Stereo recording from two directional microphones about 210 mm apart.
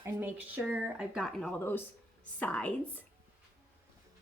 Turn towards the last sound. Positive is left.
turn(degrees=5)  # may be behind; listen again after turning